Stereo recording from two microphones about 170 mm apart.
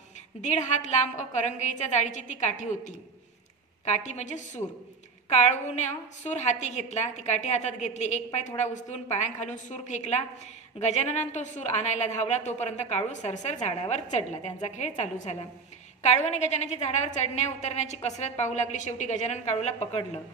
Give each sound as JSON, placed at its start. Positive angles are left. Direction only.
{"t": 0.4, "sound": "a woman's voice", "side_deg": 45}